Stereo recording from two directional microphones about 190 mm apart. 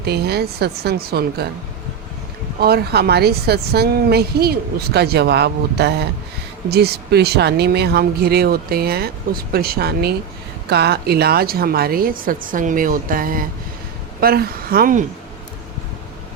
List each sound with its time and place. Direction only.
0.0 s speech: 60° right (ahead or behind)
2.6 s a woman's voice: 55° right (ahead or behind)